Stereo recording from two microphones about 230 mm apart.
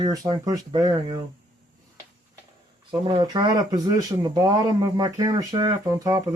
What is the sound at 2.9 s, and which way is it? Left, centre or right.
Speech, centre.